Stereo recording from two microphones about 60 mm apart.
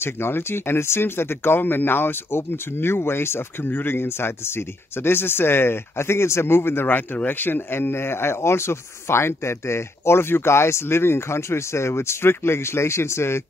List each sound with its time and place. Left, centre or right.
0.0 s speech: left